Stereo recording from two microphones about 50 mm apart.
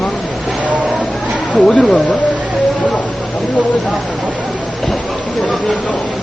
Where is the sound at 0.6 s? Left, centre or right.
Right.